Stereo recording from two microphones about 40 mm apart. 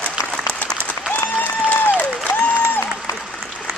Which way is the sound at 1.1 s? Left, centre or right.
Left.